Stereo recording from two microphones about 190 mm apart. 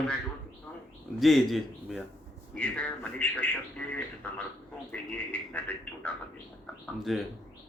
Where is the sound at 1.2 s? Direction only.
Centre (ahead or behind).